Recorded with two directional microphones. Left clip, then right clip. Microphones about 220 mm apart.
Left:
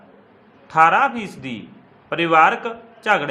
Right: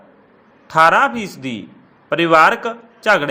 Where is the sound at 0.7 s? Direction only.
20° right (ahead or behind).